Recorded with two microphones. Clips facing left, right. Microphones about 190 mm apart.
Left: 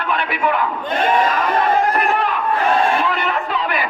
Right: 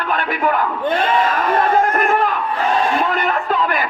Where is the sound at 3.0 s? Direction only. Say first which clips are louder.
Right 2 dB; 45° right (ahead or behind).